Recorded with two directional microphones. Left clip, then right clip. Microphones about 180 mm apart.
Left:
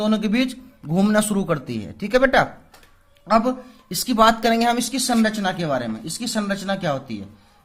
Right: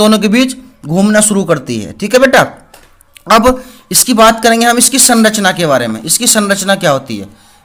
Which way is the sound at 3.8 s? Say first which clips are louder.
Right 9 dB; 20° right (ahead or behind).